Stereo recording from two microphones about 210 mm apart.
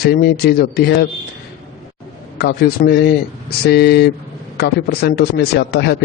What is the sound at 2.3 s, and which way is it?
A man's voice, 50° left (ahead or behind).